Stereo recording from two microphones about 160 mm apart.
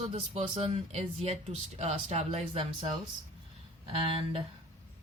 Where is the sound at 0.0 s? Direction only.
40° right (ahead or behind).